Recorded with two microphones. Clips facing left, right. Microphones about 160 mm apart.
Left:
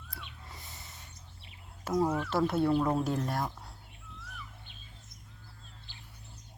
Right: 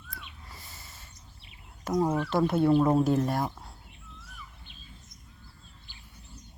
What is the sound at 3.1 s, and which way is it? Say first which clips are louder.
Speech: right 6 dB; 5° right (ahead or behind).